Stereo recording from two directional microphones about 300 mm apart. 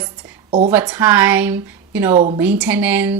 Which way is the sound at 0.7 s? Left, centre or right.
Centre.